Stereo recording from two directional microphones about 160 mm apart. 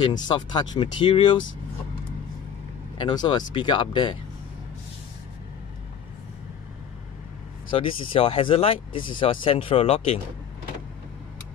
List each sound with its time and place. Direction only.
0.0 s speech: 30° left (ahead or behind)
3.0 s speech: 30° left (ahead or behind)
7.7 s speech: 35° left (ahead or behind)